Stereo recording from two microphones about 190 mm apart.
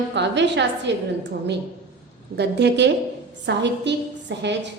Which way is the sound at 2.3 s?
60° right (ahead or behind).